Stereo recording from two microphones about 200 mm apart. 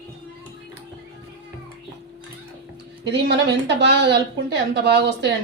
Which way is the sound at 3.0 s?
60° right (ahead or behind).